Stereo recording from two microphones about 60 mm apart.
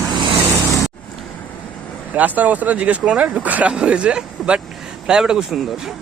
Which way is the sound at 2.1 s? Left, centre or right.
Right.